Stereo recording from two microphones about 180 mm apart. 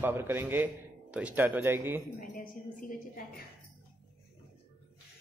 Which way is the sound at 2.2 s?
50° left (ahead or behind).